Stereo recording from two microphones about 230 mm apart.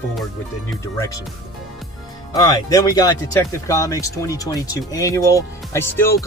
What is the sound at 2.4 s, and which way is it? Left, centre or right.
Speech, centre.